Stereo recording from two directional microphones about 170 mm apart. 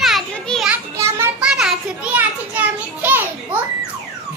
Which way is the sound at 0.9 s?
15° right (ahead or behind).